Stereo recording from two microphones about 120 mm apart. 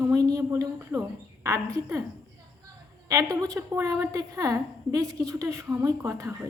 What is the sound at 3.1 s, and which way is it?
A woman's voice, 30° right (ahead or behind).